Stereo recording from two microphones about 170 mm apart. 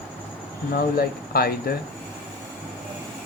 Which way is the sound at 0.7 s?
65° left (ahead or behind).